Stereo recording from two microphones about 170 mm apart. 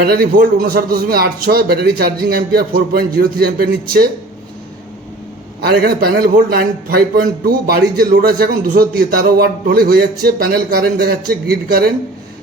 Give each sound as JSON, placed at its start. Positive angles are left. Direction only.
{"t": 0.0, "sound": "a man's voice", "side_deg": -65}
{"t": 5.5, "sound": "a man's voice", "side_deg": -65}